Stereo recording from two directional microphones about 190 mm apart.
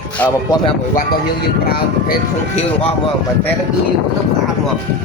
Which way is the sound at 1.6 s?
55° left (ahead or behind).